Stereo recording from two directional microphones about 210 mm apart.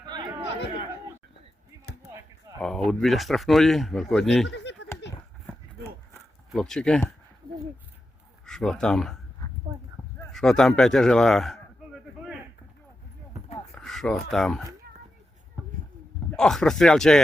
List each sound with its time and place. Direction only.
0.0 s chatter: 20° right (ahead or behind)
2.6 s speech: centre (ahead or behind)
4.4 s a sound: 55° left (ahead or behind)
6.5 s speech: centre (ahead or behind)
8.4 s speech: 5° left (ahead or behind)
10.3 s a sound: centre (ahead or behind)
13.7 s speech: centre (ahead or behind)
16.3 s speech: centre (ahead or behind)